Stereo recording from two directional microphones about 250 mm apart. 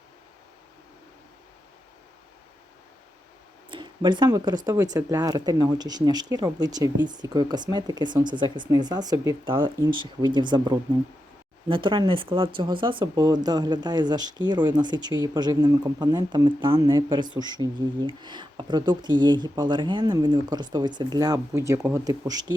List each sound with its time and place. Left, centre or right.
3.7 s speech: centre